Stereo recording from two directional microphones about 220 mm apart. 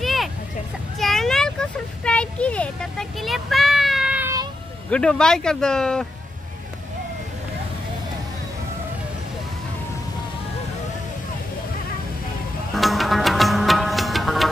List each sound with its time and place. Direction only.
0.0 s hubbub: centre (ahead or behind)
0.9 s a sound: centre (ahead or behind)
4.9 s speech: 5° left (ahead or behind)
12.7 s music: centre (ahead or behind)